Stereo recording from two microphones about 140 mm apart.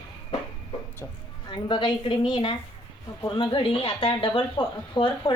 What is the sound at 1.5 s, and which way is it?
Speech, 35° left (ahead or behind).